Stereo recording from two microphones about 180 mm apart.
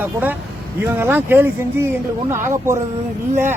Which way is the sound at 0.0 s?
10° right (ahead or behind).